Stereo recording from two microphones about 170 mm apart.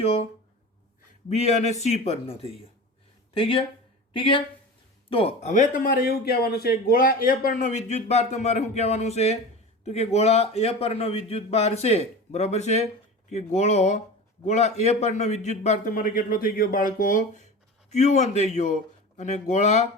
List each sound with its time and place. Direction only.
0.0 s a man's voice: 35° left (ahead or behind)
1.3 s a man's voice: 40° left (ahead or behind)
15.9 s a man's voice: 55° left (ahead or behind)